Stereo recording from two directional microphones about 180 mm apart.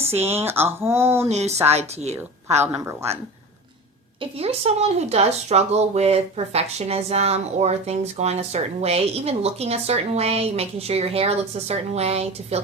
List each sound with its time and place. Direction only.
0.1 s speech: 35° right (ahead or behind)
0.3 s speech: 10° right (ahead or behind)
1.2 s speech: 35° right (ahead or behind)
4.2 s speech: 35° right (ahead or behind)